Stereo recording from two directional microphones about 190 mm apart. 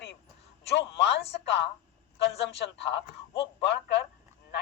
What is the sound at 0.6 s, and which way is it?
A man's voice, 65° left (ahead or behind).